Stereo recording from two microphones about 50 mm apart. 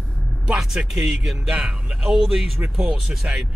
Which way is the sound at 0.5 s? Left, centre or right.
Centre.